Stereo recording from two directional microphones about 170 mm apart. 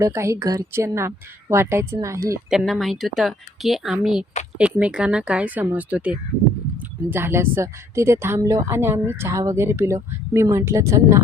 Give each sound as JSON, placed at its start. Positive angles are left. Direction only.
{"t": 0.0, "sound": "a woman's voice", "side_deg": -15}
{"t": 2.5, "sound": "a woman's voice", "side_deg": 0}